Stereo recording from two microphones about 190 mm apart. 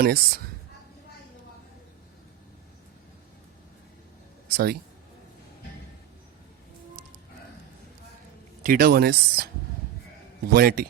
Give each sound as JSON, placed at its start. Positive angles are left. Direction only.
{"t": 0.0, "sound": "speech", "side_deg": -50}
{"t": 4.5, "sound": "speech", "side_deg": -55}
{"t": 8.6, "sound": "speech", "side_deg": -50}
{"t": 10.5, "sound": "speech", "side_deg": -55}